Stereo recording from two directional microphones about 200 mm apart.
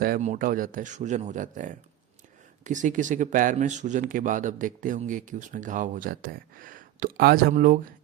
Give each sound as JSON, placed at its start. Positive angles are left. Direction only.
{"t": 0.0, "sound": "speech", "side_deg": -40}